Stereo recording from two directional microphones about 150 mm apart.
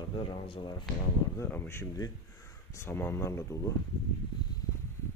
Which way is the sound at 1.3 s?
15° left (ahead or behind).